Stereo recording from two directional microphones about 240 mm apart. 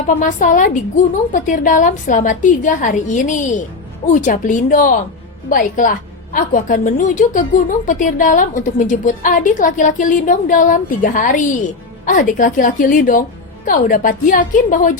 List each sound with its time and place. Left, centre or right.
0.1 s a woman's voice: left